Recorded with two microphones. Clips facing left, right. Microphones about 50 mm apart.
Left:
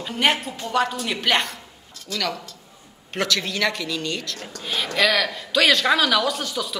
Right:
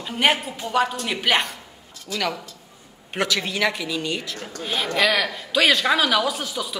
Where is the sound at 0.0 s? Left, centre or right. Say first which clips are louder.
Right 1 dB; centre.